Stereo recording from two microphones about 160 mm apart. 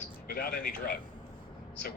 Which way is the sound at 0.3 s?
65° left (ahead or behind).